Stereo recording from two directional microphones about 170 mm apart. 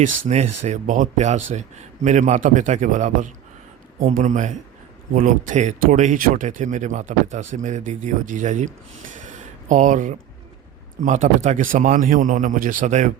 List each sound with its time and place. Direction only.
0.3 s speech: 40° right (ahead or behind)
9.1 s a sound: 50° right (ahead or behind)
11.0 s speech: 45° right (ahead or behind)